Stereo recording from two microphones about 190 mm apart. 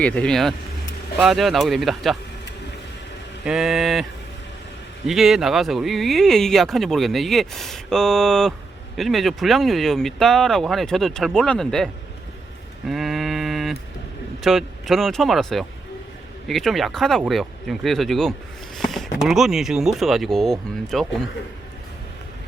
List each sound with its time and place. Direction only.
0.0 s speech: 5° left (ahead or behind)
3.4 s speech: centre (ahead or behind)
5.0 s speech: centre (ahead or behind)
12.9 s mantra: centre (ahead or behind)
14.4 s speech: centre (ahead or behind)